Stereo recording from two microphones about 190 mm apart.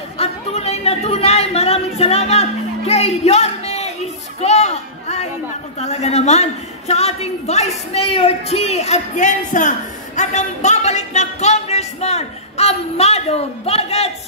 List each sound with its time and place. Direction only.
0.2 s speech: 35° left (ahead or behind)
4.4 s a sound: 35° left (ahead or behind)
5.8 s a woman's voice: 35° left (ahead or behind)